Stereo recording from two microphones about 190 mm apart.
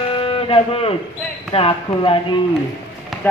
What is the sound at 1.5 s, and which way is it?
Speech, 30° left (ahead or behind).